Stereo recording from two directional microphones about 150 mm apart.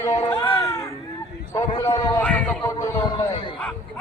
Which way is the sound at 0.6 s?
20° left (ahead or behind).